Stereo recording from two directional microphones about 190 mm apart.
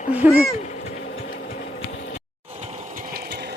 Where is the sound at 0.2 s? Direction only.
5° right (ahead or behind).